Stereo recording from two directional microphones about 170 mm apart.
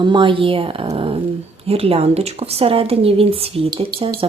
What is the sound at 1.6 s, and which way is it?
Speech, 35° right (ahead or behind).